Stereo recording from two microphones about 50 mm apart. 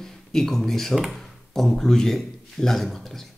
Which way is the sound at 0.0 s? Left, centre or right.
Centre.